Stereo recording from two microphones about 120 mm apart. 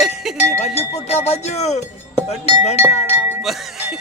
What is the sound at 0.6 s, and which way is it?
Speech, 60° left (ahead or behind).